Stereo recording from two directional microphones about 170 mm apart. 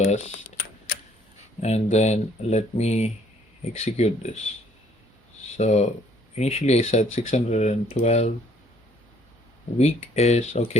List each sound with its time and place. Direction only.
0.0 s speech: 40° left (ahead or behind)
1.6 s speech: 40° left (ahead or behind)
5.5 s speech: 40° left (ahead or behind)
9.7 s speech: 40° left (ahead or behind)